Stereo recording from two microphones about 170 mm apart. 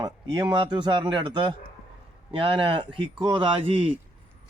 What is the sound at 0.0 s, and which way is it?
Speech, 25° right (ahead or behind).